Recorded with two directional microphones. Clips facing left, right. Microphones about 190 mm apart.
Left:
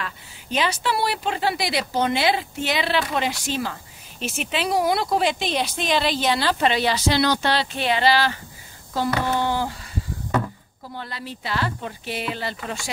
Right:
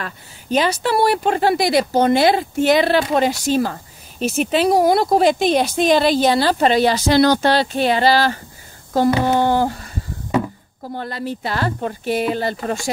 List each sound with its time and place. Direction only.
0.0 s speech: 45° right (ahead or behind)
9.4 s a sound: 50° right (ahead or behind)
10.8 s speech: 45° right (ahead or behind)